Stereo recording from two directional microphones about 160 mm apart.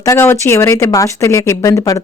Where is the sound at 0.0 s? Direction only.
15° left (ahead or behind).